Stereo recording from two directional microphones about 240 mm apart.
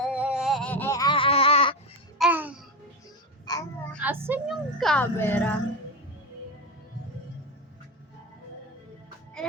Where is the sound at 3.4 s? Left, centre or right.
Centre.